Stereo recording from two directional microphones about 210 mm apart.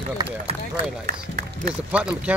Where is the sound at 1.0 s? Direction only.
40° right (ahead or behind).